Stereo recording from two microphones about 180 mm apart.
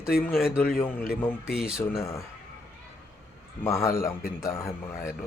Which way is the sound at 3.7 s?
15° left (ahead or behind).